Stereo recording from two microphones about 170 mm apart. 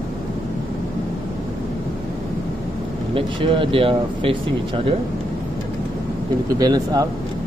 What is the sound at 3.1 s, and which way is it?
Speech, 30° right (ahead or behind).